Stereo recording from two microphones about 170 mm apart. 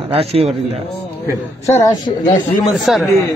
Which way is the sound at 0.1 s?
35° right (ahead or behind).